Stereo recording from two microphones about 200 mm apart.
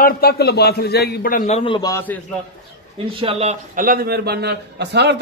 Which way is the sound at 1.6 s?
25° left (ahead or behind).